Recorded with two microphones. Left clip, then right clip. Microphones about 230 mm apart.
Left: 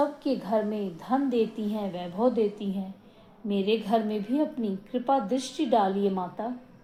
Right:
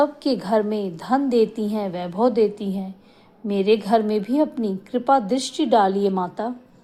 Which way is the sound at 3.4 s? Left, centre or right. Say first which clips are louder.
Right 8 dB; right.